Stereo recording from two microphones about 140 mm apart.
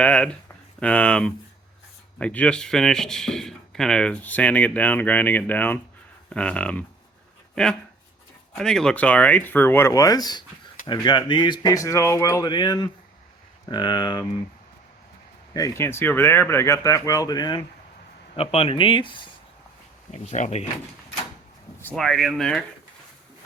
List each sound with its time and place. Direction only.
0.0 s speech: 10° left (ahead or behind); by 14.3 s 30° left (ahead or behind)
15.5 s speech: 25° left (ahead or behind)
18.3 s speech: 45° left (ahead or behind)
20.1 s speech: 55° left (ahead or behind)
21.9 s speech: centre (ahead or behind)